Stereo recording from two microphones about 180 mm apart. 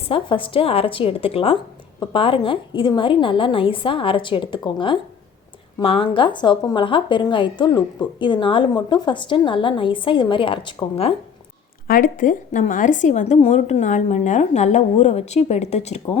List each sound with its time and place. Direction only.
0.1 s a woman's voice: 30° left (ahead or behind)
11.9 s a woman's voice: 50° left (ahead or behind)